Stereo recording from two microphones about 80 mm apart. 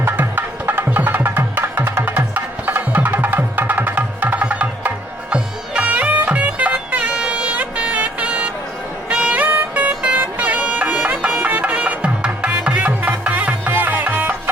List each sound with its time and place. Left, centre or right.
0.0 s music: right